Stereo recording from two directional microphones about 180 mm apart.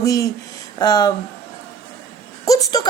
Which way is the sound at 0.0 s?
20° left (ahead or behind).